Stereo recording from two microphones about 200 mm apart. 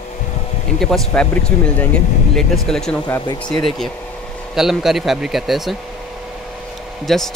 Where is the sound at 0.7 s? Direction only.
5° left (ahead or behind).